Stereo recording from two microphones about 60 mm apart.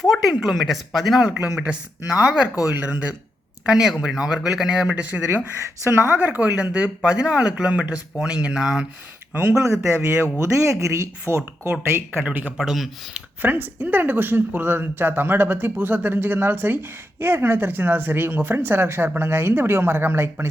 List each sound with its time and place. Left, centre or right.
0.0 s speech: centre
1.6 s speech: centre
2.7 s speech: right
3.7 s speech: centre
5.8 s speech: right
6.1 s speech: right
8.6 s speech: centre
9.3 s speech: right
9.6 s speech: right
12.2 s speech: right
12.5 s speech: centre
13.1 s speech: right